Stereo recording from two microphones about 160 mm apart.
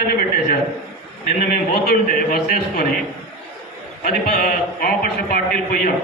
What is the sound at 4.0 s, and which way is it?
A man's voice, 60° left (ahead or behind).